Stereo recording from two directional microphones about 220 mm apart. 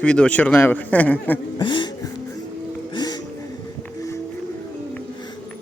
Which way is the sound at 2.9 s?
20° left (ahead or behind).